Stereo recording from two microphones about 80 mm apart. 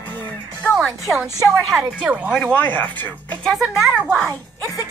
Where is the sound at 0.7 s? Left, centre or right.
Centre.